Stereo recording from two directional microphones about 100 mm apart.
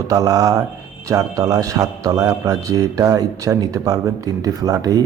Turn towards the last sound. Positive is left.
turn(degrees=-35)  # may be behind; listen again after turning